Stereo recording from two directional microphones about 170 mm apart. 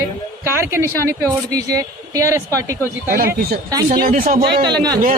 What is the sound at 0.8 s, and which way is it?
Speech, 15° left (ahead or behind).